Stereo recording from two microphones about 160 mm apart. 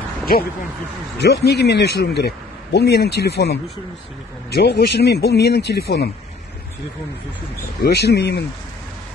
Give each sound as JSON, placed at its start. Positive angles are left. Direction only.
{"t": 1.1, "sound": "speech", "side_deg": 90}
{"t": 4.6, "sound": "speech", "side_deg": 90}
{"t": 7.8, "sound": "speech", "side_deg": 90}